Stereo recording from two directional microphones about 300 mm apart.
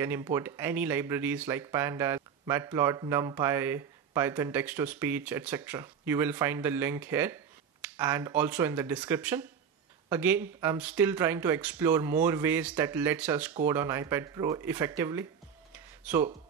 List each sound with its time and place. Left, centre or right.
0.0 s speech: centre
15.7 s music: centre